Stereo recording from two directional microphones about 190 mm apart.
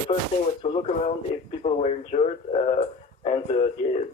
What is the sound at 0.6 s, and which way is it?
Speech, 35° left (ahead or behind).